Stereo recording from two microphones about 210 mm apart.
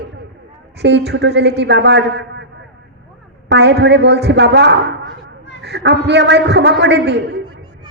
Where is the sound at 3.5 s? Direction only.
55° right (ahead or behind).